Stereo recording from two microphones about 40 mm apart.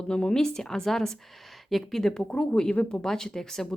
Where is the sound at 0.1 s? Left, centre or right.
Left.